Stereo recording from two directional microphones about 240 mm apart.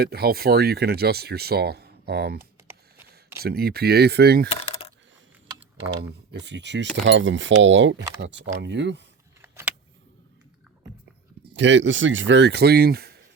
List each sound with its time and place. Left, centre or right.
0.0 s speech: right
4.5 s coin: left
6.0 s speech: right
9.4 s vehicle: centre
11.5 s speech: right